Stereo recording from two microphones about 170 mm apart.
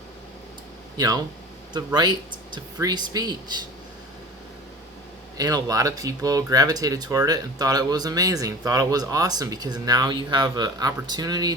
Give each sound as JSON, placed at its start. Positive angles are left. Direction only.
{"t": 0.9, "sound": "speech", "side_deg": -20}
{"t": 5.4, "sound": "speech", "side_deg": -20}